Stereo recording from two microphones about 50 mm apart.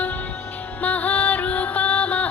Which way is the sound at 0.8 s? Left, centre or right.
Left.